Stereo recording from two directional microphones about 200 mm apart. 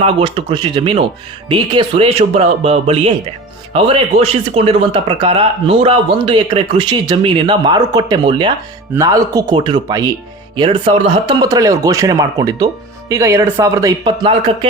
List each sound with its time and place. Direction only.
0.0 s speech: 25° right (ahead or behind)